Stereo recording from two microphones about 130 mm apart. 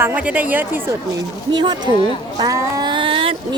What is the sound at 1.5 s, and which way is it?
Speech, 35° right (ahead or behind).